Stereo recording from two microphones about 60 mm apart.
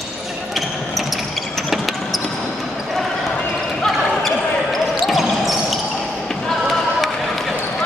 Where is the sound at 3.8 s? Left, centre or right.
Centre.